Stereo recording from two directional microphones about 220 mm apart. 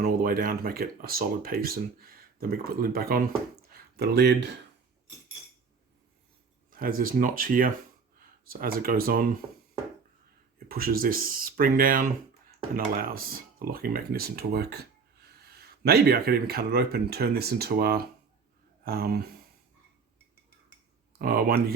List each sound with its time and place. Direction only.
0.0 s speech: 40° right (ahead or behind)
6.7 s speech: 40° right (ahead or behind)
10.7 s speech: 40° right (ahead or behind)
15.8 s speech: 45° right (ahead or behind)
21.2 s speech: 40° right (ahead or behind)